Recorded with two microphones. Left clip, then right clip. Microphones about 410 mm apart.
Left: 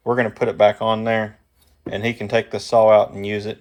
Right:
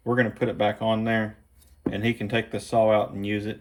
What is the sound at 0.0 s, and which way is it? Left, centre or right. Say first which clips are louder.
Speech: left 5 dB; centre.